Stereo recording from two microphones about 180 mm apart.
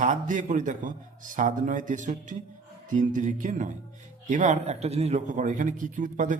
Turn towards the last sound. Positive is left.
turn(degrees=-45)  # may be behind; listen again after turning